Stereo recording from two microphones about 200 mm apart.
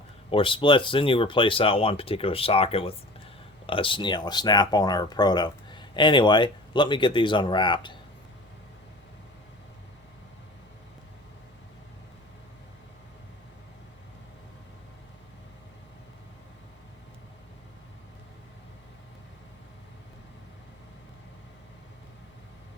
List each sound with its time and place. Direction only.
0.3 s speech: 25° left (ahead or behind)